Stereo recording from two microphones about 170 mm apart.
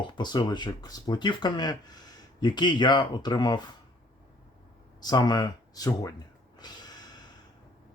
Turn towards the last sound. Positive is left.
turn(degrees=25)  # may be behind; listen again after turning